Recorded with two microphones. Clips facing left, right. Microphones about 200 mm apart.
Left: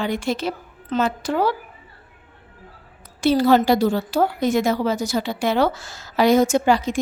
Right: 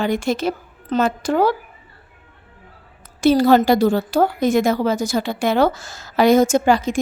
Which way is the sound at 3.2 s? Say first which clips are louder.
Right 3 dB; 45° right (ahead or behind).